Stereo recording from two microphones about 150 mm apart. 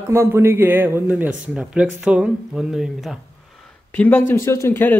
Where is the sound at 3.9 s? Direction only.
15° left (ahead or behind).